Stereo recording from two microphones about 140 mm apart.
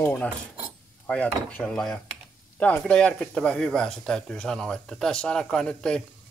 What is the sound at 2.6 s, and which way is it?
Speech, 10° left (ahead or behind).